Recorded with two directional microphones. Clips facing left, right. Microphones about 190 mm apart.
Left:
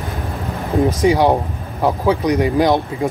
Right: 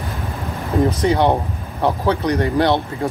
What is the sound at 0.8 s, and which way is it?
Speech, 10° left (ahead or behind).